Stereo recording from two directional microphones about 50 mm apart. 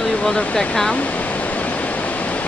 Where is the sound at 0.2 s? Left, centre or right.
Centre.